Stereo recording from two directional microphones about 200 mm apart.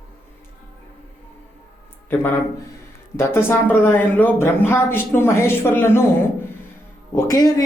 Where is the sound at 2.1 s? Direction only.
10° left (ahead or behind).